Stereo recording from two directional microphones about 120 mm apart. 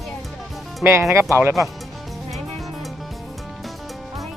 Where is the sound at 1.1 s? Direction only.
25° right (ahead or behind).